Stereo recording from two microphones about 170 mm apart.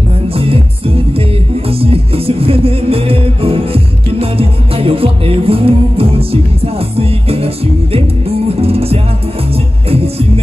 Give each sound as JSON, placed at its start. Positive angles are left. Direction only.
{"t": 0.3, "sound": "music", "side_deg": -35}